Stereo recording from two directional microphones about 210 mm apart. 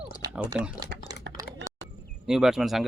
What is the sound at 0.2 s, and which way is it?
Typing, 15° right (ahead or behind).